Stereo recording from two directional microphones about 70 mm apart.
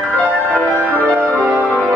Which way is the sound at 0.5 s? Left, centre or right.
Centre.